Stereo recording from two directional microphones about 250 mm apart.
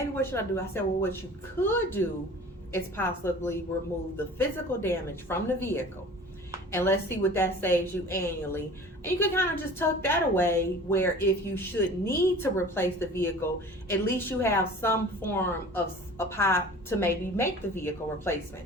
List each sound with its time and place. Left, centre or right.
0.2 s a woman's voice: centre